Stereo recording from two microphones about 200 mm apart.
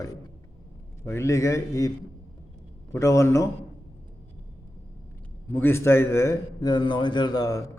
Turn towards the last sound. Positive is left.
turn(degrees=20)  # may be behind; listen again after turning